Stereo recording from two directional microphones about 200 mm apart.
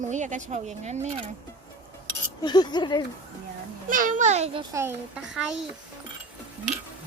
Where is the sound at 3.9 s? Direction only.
40° right (ahead or behind).